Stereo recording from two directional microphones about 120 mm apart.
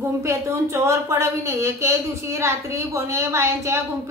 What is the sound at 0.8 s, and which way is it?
A woman's voice, 25° right (ahead or behind).